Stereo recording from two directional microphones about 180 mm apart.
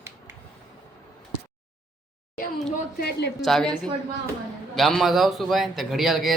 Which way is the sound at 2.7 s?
60° left (ahead or behind).